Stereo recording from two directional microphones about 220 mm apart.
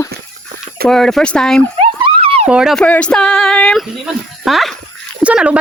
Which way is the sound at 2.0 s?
25° right (ahead or behind).